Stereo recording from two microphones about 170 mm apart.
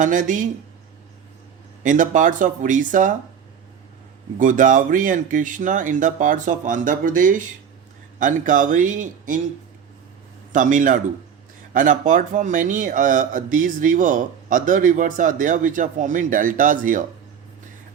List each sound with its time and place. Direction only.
0.0 s speech: 50° right (ahead or behind)
1.8 s speech: 50° right (ahead or behind)
4.4 s speech: 50° right (ahead or behind)
10.5 s speech: 50° right (ahead or behind)